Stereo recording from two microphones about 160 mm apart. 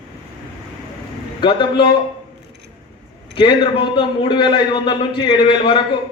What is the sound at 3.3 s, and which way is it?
A man's voice, 30° left (ahead or behind).